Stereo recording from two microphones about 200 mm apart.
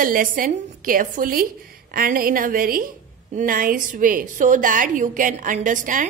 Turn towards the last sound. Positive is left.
turn(degrees=-40)  # may be behind; listen again after turning